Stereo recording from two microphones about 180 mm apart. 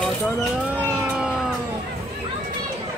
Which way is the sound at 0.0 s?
5° right (ahead or behind).